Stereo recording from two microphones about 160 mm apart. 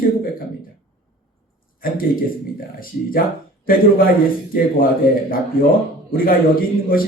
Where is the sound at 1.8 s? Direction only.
65° left (ahead or behind).